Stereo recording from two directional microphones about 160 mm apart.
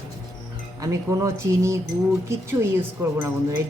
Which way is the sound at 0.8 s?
20° right (ahead or behind).